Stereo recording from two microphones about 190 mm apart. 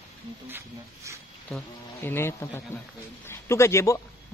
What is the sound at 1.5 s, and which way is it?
A man's voice, 10° left (ahead or behind).